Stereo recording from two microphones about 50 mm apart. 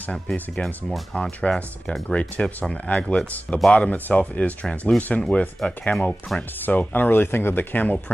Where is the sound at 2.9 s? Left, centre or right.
Centre.